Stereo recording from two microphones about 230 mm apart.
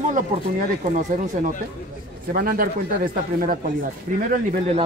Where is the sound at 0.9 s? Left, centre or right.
Right.